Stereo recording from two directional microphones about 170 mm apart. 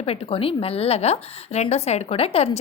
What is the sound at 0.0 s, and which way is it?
A woman's voice, 35° left (ahead or behind).